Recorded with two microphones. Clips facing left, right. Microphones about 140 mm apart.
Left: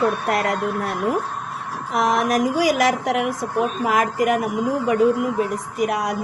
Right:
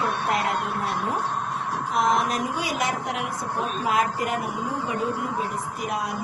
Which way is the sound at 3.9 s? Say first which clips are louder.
Left 4 dB; 85° left.